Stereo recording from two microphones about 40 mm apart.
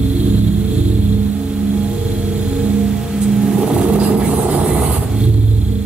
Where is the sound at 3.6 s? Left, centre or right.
Right.